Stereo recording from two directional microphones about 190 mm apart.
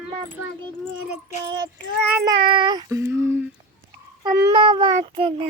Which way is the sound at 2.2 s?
25° right (ahead or behind).